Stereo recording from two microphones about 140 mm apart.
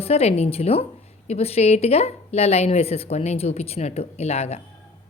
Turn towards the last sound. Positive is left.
turn(degrees=50)  # may be behind; listen again after turning